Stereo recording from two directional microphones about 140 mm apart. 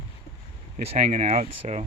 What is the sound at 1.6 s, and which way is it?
Speech, 55° right (ahead or behind).